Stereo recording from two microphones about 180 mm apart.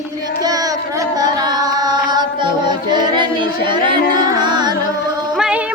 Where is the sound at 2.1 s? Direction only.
25° right (ahead or behind).